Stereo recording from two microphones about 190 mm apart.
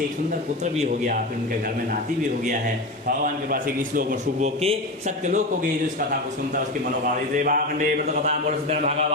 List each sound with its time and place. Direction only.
0.6 s a man's voice: 40° right (ahead or behind)
3.5 s a man's voice: 45° right (ahead or behind)
7.3 s a man's voice: 45° right (ahead or behind)